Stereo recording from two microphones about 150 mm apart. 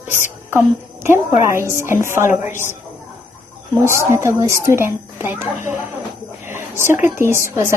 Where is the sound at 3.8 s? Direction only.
20° right (ahead or behind).